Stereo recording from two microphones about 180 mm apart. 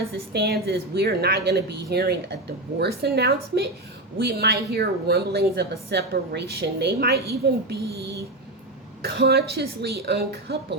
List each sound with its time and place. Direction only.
0.3 s a woman's voice: 60° right (ahead or behind)
9.0 s a woman's voice: 60° right (ahead or behind)